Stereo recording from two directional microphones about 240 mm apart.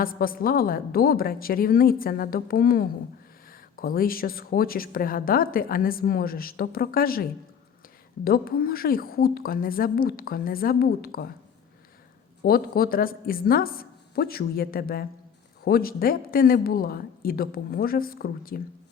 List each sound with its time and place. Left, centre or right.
0.0 s speech: left
12.4 s speech: left